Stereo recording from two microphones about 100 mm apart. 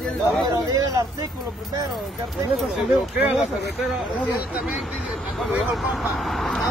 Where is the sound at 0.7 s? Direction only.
35° right (ahead or behind).